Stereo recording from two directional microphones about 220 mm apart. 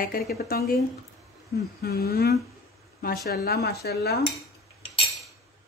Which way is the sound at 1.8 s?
45° left (ahead or behind).